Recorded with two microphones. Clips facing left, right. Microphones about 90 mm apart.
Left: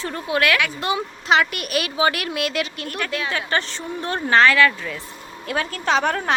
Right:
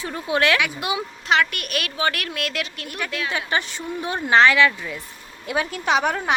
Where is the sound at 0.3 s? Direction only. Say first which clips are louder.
Even; 25° right (ahead or behind).